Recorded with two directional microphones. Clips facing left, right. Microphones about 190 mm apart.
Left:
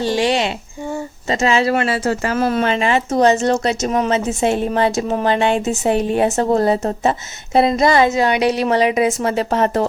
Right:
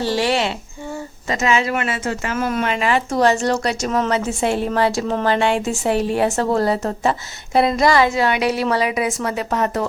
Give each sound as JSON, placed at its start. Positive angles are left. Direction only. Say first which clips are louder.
{"t": 0.0, "sound": "speech", "louder": "left 2 dB", "side_deg": 20}
{"t": 1.3, "sound": "speech", "louder": "left 3 dB", "side_deg": 30}